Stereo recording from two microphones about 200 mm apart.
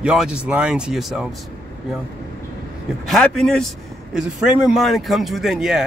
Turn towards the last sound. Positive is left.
turn(degrees=0)  # may be behind; listen again after turning